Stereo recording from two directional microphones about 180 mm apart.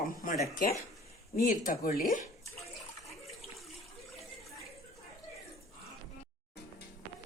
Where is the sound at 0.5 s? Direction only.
50° left (ahead or behind).